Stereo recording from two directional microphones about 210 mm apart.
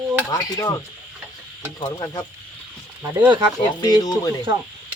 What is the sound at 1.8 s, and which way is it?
Speech, 20° left (ahead or behind).